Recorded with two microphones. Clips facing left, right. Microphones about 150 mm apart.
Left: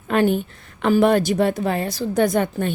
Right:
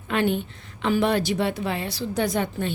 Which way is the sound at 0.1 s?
45° left (ahead or behind).